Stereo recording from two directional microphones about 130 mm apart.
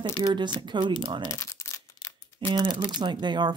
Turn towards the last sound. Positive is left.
turn(degrees=-35)  # may be behind; listen again after turning